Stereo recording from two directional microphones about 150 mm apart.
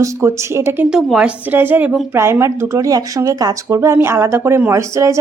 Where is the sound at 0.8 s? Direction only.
5° right (ahead or behind).